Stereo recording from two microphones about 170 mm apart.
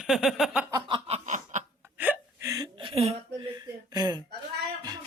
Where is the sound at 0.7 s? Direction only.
35° right (ahead or behind).